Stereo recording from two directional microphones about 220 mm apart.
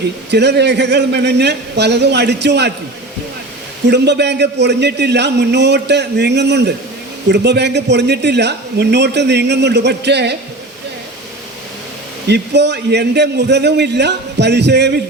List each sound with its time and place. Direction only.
0.3 s speech: 50° right (ahead or behind)
3.8 s speech: 50° right (ahead or behind)
12.3 s speech: 50° right (ahead or behind)